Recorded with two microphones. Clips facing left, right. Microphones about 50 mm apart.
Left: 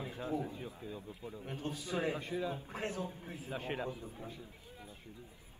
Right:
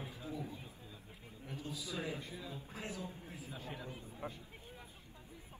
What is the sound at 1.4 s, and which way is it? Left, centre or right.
A man's voice, left.